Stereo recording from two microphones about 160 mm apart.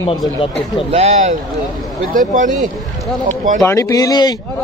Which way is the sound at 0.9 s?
40° right (ahead or behind).